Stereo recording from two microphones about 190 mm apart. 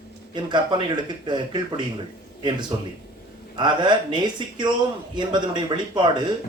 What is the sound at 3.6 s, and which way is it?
Speech, 25° right (ahead or behind).